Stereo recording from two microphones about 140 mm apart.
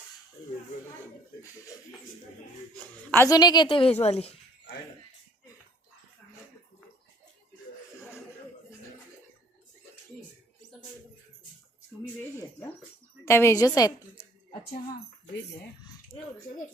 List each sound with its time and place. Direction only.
1.4 s a woman's voice: 25° left (ahead or behind)
3.2 s a woman's voice: 30° left (ahead or behind)
4.0 s a sound: 45° left (ahead or behind)
12.4 s a woman's voice: 10° left (ahead or behind)